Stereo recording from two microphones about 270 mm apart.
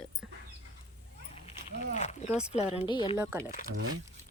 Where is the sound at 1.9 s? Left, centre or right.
Left.